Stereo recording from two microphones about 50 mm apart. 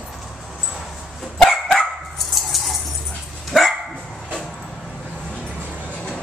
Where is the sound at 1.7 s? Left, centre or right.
Centre.